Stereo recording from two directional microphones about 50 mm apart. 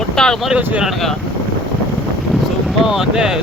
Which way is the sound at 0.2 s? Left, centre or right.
Centre.